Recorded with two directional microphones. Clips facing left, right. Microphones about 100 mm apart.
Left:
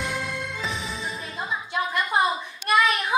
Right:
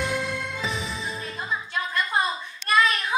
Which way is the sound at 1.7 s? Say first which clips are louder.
Left 3 dB; 15° left (ahead or behind).